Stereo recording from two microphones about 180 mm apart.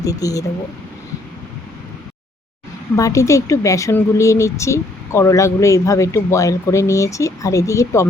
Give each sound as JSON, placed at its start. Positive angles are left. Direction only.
{"t": 0.0, "sound": "speech", "side_deg": 20}
{"t": 2.9, "sound": "a woman's voice", "side_deg": 15}